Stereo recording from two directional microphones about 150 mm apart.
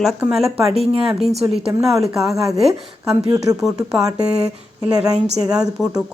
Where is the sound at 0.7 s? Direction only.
40° right (ahead or behind).